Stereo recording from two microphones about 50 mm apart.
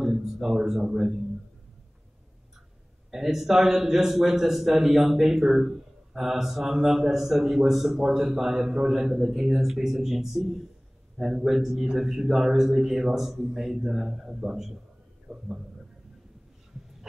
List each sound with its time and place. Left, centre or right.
0.0 s a man's voice: centre
3.1 s a man's voice: centre